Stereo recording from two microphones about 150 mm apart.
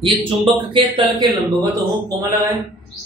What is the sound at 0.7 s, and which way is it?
A man's voice, 30° right (ahead or behind).